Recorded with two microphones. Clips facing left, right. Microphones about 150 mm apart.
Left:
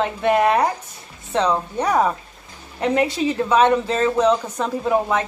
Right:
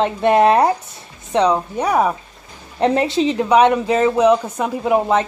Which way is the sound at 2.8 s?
30° right (ahead or behind).